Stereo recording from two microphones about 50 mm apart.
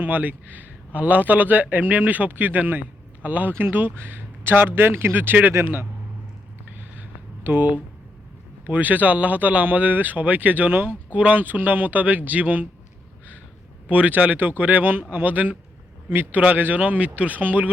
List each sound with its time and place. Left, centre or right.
0.0 s speech: right
7.4 s speech: right
13.8 s speech: right